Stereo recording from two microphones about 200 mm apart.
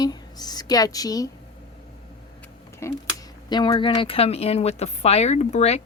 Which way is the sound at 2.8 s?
15° left (ahead or behind).